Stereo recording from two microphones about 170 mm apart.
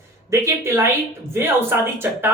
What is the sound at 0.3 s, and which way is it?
Speech, 15° right (ahead or behind).